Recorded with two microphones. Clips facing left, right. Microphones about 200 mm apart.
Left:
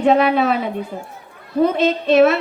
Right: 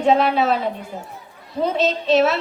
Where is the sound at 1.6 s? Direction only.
55° left (ahead or behind).